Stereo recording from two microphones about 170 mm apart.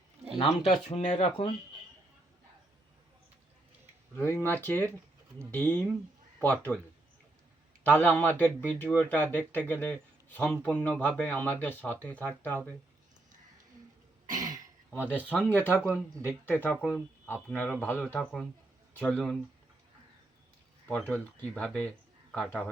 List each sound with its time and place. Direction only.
0.3 s speech: 40° left (ahead or behind)
4.2 s speech: 15° left (ahead or behind)
7.9 s speech: 10° left (ahead or behind)
14.3 s throat clearing: 20° right (ahead or behind)
15.1 s speech: 10° left (ahead or behind)
16.7 s speech: 5° right (ahead or behind)
17.2 s speech: 10° left (ahead or behind)
20.8 s a man's voice: 10° left (ahead or behind)